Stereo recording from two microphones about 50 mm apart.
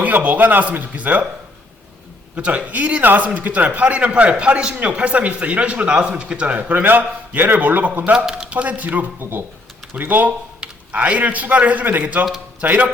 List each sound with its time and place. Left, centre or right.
0.0 s speech: right
2.3 s a man's voice: right
6.6 s a man's voice: right